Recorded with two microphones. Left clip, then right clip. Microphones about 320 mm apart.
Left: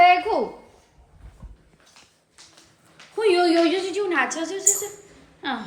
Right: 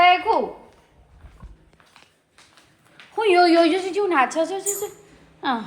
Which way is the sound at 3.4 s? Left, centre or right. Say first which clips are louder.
Right 3 dB; centre.